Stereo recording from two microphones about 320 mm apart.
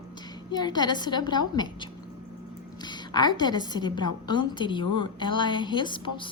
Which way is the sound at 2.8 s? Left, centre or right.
Centre.